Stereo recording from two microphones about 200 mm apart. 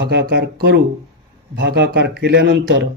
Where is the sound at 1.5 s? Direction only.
60° right (ahead or behind).